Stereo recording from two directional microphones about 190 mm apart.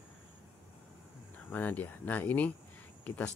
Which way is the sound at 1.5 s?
10° left (ahead or behind).